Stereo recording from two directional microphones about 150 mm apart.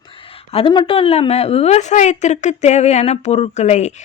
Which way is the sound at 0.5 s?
35° left (ahead or behind).